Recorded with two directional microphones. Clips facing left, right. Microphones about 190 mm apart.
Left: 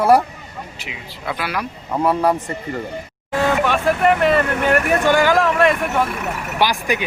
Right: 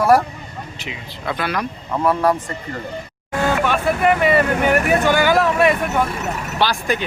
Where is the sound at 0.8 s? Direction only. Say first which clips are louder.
Right 3 dB; 10° left (ahead or behind).